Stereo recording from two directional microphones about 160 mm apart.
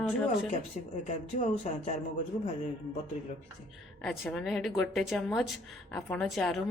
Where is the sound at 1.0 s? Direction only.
50° left (ahead or behind).